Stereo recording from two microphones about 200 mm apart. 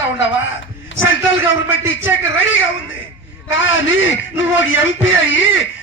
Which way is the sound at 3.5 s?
70° left (ahead or behind).